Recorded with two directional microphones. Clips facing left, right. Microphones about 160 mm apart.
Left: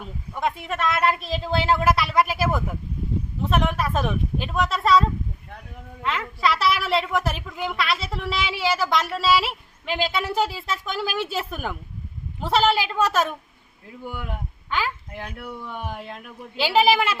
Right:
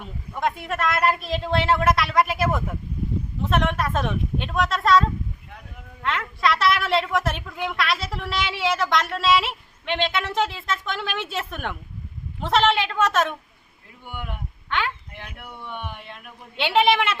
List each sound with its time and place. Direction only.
0.0 s a woman's voice: centre (ahead or behind)
14.7 s a child's voice: 5° left (ahead or behind)
15.1 s speech: 40° left (ahead or behind)
16.6 s a woman's voice: 5° left (ahead or behind)